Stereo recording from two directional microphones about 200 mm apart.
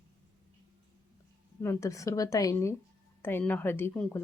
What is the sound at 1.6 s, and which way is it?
Speech, 15° left (ahead or behind).